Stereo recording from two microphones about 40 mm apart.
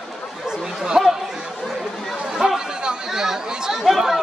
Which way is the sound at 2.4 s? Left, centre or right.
Right.